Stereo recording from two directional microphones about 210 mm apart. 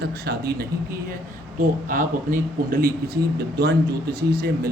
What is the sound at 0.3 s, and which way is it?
Speech, 50° right (ahead or behind).